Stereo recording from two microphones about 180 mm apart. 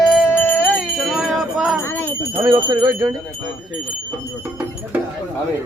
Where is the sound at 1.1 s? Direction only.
Centre (ahead or behind).